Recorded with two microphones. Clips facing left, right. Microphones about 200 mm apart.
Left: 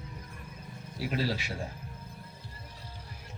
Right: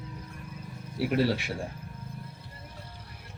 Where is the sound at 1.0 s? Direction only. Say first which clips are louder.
Right 6 dB; 60° right (ahead or behind).